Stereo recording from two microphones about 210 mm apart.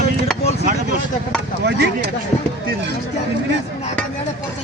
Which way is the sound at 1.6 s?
55° right (ahead or behind).